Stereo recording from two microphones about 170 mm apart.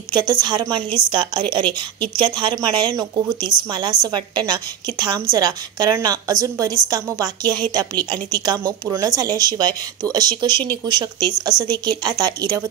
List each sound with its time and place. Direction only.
0.2 s speech: 25° right (ahead or behind)